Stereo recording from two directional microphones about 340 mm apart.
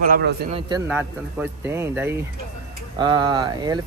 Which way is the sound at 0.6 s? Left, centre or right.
Centre.